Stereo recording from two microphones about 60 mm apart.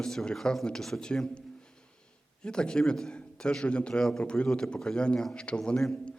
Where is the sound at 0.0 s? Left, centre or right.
Centre.